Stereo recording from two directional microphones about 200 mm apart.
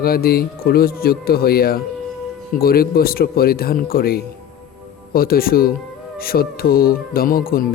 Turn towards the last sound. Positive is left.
turn(degrees=45)  # may be behind; listen again after turning